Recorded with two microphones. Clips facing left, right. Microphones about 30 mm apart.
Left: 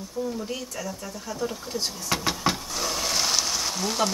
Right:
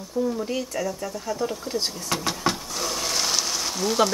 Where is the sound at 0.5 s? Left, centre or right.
Centre.